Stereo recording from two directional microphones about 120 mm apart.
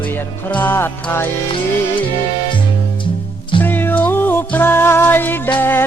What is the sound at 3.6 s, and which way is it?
Music, 15° left (ahead or behind).